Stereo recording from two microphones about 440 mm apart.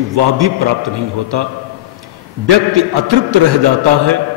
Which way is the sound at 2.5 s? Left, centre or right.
Right.